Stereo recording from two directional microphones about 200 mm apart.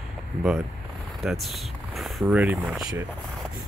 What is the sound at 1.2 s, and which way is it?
Speech, centre (ahead or behind).